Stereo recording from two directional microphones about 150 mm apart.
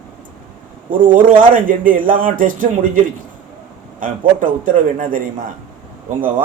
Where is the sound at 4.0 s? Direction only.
65° right (ahead or behind).